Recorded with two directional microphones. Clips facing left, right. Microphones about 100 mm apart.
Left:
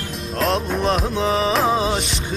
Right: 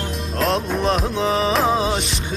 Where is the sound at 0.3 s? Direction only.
Centre (ahead or behind).